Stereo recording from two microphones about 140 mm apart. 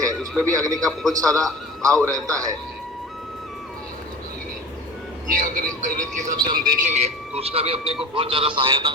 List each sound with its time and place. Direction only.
0.0 s a man's voice: 25° right (ahead or behind)
5.3 s speech: 75° right (ahead or behind)
6.9 s a man's voice: 50° right (ahead or behind)